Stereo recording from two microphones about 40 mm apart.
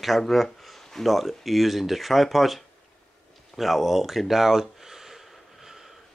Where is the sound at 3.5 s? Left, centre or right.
Centre.